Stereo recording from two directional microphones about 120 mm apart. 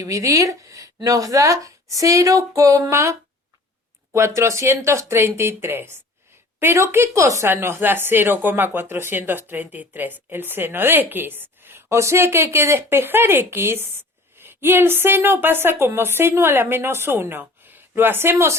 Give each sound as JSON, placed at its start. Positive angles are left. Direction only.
{"t": 0.0, "sound": "a woman's voice", "side_deg": -25}